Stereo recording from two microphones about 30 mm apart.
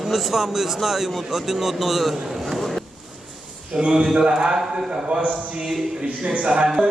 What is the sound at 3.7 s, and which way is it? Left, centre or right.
A man's voice, right.